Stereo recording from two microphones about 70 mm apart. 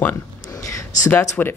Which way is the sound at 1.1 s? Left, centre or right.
Left.